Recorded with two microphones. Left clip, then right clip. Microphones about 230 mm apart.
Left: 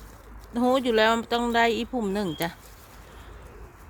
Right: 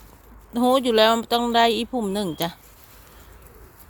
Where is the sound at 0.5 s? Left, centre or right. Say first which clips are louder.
Right 4 dB; right.